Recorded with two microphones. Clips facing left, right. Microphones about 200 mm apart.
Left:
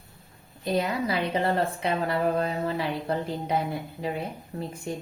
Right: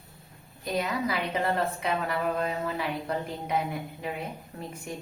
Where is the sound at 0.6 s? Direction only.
30° left (ahead or behind).